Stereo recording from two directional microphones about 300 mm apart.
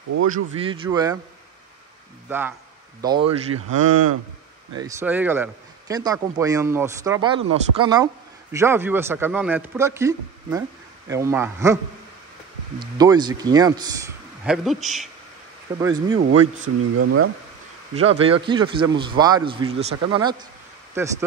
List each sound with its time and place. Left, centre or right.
0.1 s speech: right
0.6 s a man's voice: centre
2.2 s a man's voice: centre
3.3 s speech: right
4.7 s a man's voice: centre
14.4 s a woman's voice: centre
15.8 s a man's voice: centre
17.0 s speech: right
17.9 s a man's voice: centre